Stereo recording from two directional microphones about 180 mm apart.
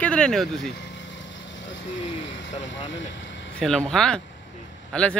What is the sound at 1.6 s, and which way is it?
Speech, 90° left.